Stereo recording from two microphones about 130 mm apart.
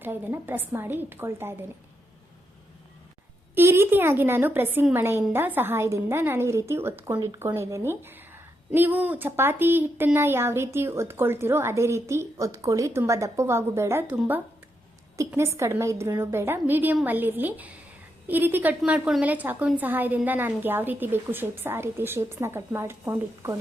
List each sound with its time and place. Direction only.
0.0 s a woman's voice: 15° right (ahead or behind)
3.5 s a woman's voice: 20° right (ahead or behind)
15.3 s a woman's voice: 20° right (ahead or behind)